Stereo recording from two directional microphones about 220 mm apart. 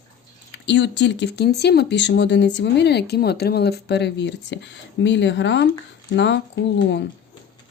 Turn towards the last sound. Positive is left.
turn(degrees=55)  # may be behind; listen again after turning